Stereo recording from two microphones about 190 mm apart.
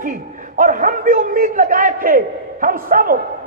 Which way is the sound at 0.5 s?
45° right (ahead or behind).